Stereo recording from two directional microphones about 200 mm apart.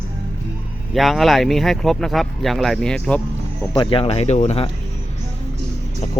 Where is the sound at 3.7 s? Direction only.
25° left (ahead or behind).